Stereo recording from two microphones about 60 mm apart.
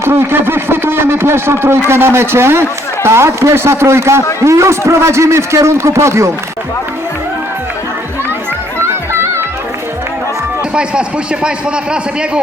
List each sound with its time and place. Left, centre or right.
0.0 s a man's voice: right
8.8 s music: right
11.4 s a man's voice: centre